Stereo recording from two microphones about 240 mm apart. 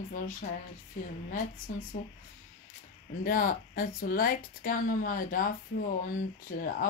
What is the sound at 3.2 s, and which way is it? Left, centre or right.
Speech, left.